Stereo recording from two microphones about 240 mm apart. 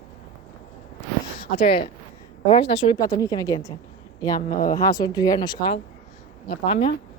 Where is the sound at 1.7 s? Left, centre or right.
Left.